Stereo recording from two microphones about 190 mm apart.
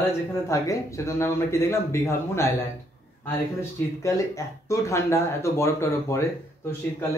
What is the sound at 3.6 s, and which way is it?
Speech, 15° left (ahead or behind).